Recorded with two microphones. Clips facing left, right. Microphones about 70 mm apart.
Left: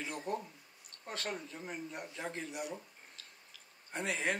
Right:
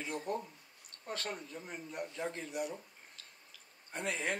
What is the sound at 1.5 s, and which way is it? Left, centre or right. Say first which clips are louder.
Speech: left 1 dB; left.